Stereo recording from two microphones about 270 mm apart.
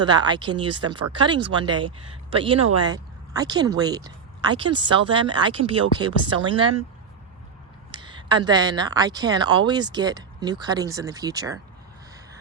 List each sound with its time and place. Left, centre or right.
0.0 s speech: centre
7.9 s speech: centre